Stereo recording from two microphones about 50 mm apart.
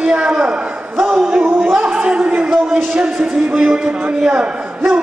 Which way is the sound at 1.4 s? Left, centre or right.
Right.